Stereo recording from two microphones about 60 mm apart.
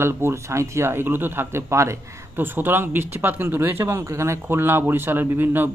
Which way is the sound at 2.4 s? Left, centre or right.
Right.